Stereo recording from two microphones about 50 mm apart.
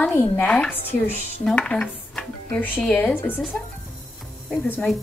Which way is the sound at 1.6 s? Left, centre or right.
Centre.